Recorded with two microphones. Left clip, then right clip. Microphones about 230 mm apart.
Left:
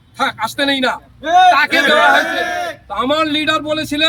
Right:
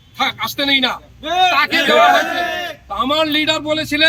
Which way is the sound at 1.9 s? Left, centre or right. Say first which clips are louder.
Right 2 dB; right.